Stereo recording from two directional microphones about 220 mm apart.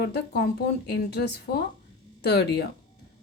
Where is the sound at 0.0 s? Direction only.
45° left (ahead or behind).